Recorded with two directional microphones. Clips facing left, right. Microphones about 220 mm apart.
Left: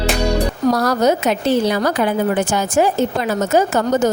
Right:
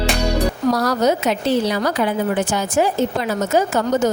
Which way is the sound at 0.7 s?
50° left (ahead or behind).